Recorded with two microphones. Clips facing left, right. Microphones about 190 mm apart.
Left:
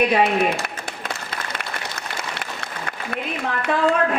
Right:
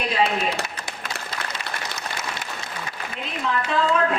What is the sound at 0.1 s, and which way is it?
Speech, 60° left (ahead or behind).